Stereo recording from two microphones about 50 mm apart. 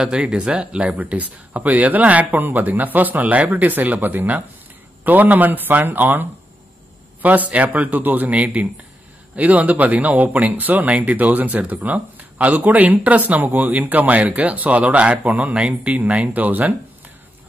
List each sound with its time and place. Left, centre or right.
0.0 s speech: centre; by 16.7 s right